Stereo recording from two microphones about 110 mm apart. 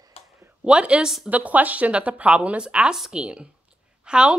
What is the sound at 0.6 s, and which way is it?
A woman's voice, 10° right (ahead or behind).